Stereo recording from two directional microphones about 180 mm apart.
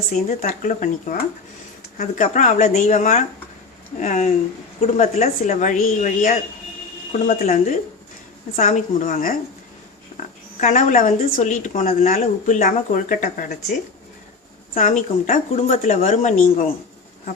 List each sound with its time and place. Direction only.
0.4 s speech: 45° left (ahead or behind)
10.6 s speech: 45° left (ahead or behind)
14.8 s speech: 45° left (ahead or behind)